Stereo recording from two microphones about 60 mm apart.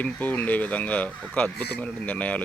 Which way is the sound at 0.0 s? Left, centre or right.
Left.